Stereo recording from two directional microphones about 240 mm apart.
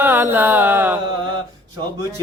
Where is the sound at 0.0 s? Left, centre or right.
Centre.